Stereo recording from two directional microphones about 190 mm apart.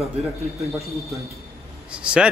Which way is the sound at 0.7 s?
Centre (ahead or behind).